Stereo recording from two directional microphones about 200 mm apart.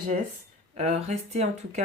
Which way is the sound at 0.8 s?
35° right (ahead or behind).